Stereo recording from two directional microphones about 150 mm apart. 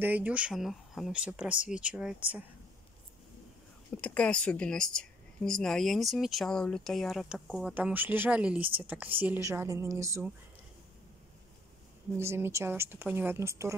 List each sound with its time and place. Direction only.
0.0 s speech: 10° right (ahead or behind)
4.0 s speech: 10° left (ahead or behind); by 10.3 s 20° right (ahead or behind)
12.2 s speech: 15° right (ahead or behind)